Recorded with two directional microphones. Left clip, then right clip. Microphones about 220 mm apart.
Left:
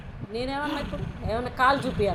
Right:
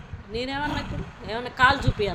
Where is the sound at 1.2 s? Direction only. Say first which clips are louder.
Right 2 dB; 10° right (ahead or behind).